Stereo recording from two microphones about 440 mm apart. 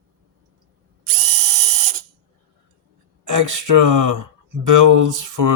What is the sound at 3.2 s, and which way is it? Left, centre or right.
Speech, right.